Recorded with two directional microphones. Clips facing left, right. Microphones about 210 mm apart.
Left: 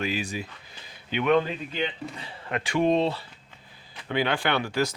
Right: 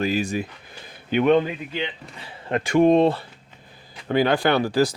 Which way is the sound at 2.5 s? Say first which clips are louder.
Right 7 dB; 45° right (ahead or behind).